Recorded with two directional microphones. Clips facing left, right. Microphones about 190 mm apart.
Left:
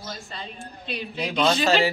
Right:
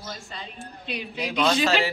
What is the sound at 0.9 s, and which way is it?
A woman's voice, 10° right (ahead or behind).